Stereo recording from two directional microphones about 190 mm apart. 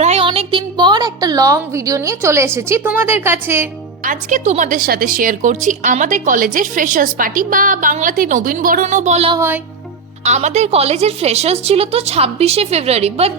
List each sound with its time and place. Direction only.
0.0 s a woman's voice: 30° right (ahead or behind); by 3.7 s 10° right (ahead or behind)
4.0 s a woman's voice: 45° right (ahead or behind)